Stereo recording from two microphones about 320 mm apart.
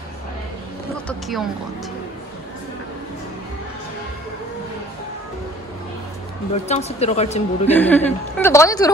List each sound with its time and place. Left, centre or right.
6.5 s speech: centre
7.7 s a woman's voice: centre